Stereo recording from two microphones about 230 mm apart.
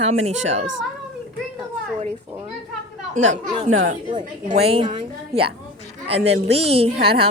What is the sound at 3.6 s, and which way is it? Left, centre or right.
Speech, right.